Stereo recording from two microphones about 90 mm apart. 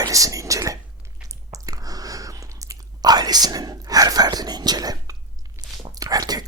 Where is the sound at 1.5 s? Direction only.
45° right (ahead or behind).